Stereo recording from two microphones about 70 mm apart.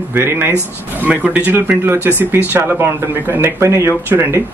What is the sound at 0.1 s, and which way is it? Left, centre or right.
Speech, right.